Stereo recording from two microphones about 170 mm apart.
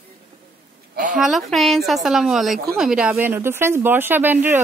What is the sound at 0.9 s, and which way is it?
Speech, 50° right (ahead or behind).